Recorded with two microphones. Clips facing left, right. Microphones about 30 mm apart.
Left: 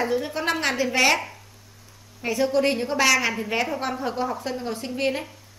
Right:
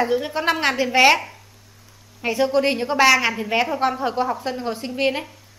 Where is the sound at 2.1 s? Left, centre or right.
Centre.